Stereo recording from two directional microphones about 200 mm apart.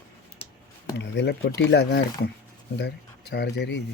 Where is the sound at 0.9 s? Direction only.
60° left (ahead or behind).